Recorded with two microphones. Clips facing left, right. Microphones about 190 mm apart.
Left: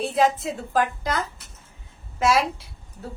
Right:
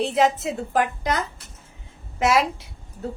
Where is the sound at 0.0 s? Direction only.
20° right (ahead or behind).